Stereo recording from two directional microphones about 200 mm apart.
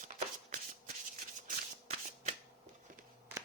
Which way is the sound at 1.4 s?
35° right (ahead or behind).